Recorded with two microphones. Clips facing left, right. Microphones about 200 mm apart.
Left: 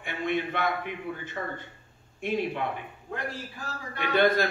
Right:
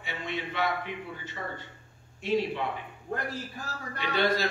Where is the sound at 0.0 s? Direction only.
55° left (ahead or behind).